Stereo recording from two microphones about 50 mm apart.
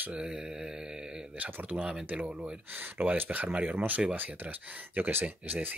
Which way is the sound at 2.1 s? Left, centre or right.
Right.